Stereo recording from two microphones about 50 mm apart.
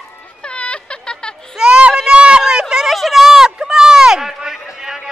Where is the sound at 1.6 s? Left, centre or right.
Centre.